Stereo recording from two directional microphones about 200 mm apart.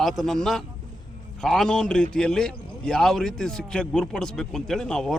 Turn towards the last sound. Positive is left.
turn(degrees=5)  # may be behind; listen again after turning